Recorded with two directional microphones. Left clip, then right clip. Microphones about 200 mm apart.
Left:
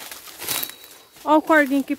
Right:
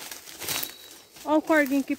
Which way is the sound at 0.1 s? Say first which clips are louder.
Left 3 dB; 15° left (ahead or behind).